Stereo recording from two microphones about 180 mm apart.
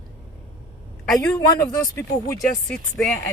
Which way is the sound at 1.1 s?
20° left (ahead or behind).